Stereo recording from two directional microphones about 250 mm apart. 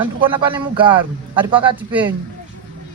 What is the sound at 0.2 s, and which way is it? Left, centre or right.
Speech, centre.